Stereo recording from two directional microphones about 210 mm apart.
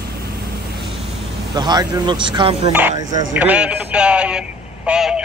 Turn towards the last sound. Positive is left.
turn(degrees=-5)  # may be behind; listen again after turning